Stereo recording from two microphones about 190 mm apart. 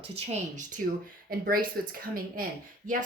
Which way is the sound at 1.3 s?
50° right (ahead or behind).